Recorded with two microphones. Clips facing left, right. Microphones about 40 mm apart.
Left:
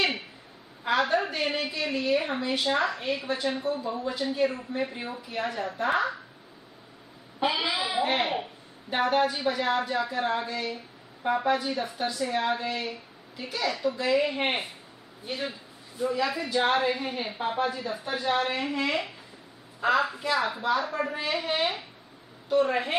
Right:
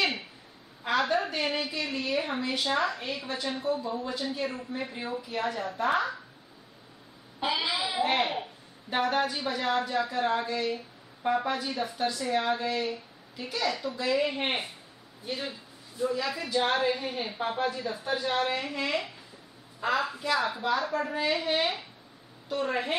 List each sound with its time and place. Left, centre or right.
0.8 s a woman's voice: centre
7.4 s a child's voice: centre
20.3 s a woman's voice: centre